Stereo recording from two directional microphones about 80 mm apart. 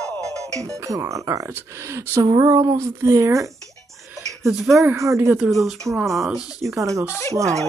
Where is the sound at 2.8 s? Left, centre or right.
Right.